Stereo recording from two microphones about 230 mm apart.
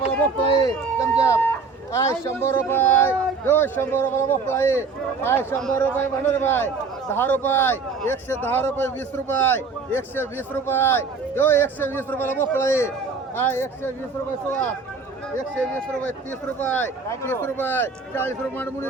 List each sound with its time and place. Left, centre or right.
0.4 s a sound: centre
1.2 s a man's voice: centre
15.5 s a man's voice: centre